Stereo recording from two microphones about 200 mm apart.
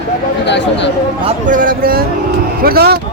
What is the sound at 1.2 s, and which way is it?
Speech, 40° right (ahead or behind).